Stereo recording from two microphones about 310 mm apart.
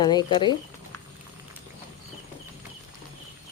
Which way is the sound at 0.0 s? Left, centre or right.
Centre.